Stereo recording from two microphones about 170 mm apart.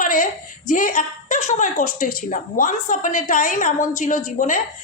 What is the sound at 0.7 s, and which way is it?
A woman's voice, 50° left (ahead or behind).